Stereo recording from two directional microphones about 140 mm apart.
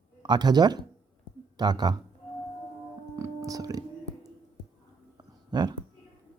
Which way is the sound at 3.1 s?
20° right (ahead or behind).